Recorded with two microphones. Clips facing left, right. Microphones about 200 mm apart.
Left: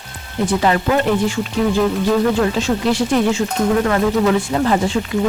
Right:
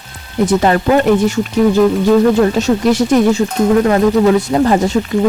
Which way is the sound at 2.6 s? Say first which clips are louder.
Right 5 dB; 45° right (ahead or behind).